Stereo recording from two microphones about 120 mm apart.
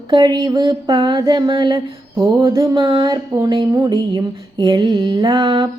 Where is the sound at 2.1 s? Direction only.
25° right (ahead or behind).